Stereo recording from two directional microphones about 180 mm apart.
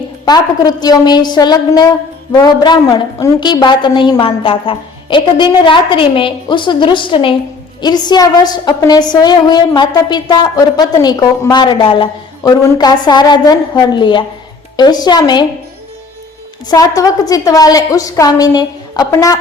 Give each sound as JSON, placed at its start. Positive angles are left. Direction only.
{"t": 0.3, "sound": "a woman's voice", "side_deg": 20}
{"t": 16.6, "sound": "a woman's voice", "side_deg": 20}